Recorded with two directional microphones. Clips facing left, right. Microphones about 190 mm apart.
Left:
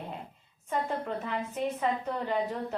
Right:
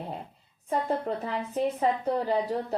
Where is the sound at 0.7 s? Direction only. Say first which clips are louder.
Right 4 dB; 35° right (ahead or behind).